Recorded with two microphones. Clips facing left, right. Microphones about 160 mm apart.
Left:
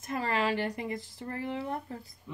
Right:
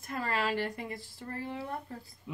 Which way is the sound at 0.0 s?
20° left (ahead or behind).